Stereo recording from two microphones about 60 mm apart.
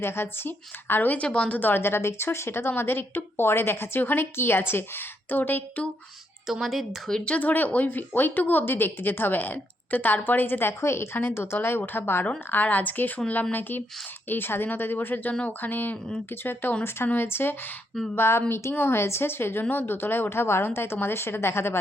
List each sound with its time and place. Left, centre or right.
0.0 s a woman's voice: left
6.5 s speech: centre
7.3 s a woman's voice: left